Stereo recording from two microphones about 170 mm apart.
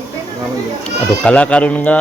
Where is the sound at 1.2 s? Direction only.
5° left (ahead or behind).